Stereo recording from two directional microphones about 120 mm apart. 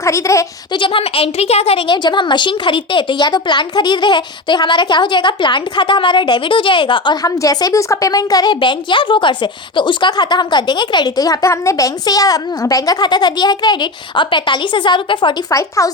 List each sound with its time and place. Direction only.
0.0 s speech: 25° left (ahead or behind)
0.7 s a woman's voice: 45° left (ahead or behind)
15.5 s speech: 25° left (ahead or behind)